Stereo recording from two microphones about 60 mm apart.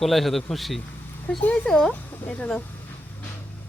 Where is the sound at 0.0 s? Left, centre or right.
Centre.